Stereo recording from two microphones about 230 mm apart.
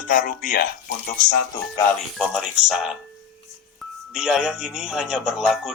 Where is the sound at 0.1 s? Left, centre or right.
Left.